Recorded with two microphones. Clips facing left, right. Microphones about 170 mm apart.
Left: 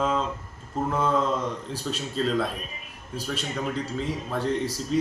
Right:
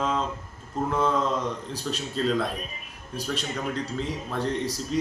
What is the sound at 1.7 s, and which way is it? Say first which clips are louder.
Speech: left 1 dB; centre (ahead or behind).